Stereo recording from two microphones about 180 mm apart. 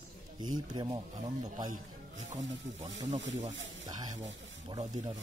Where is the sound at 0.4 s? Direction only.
25° right (ahead or behind).